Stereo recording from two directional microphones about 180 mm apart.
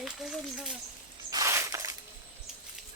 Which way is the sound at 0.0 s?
Centre (ahead or behind).